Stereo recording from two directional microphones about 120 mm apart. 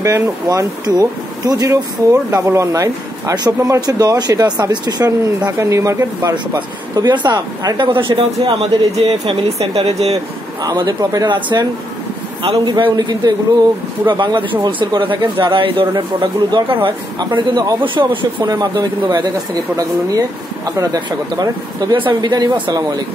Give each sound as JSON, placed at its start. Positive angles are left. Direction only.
{"t": 0.0, "sound": "speech", "side_deg": -25}
{"t": 7.0, "sound": "speech", "side_deg": -35}
{"t": 10.6, "sound": "speech", "side_deg": -35}
{"t": 12.6, "sound": "speech", "side_deg": -35}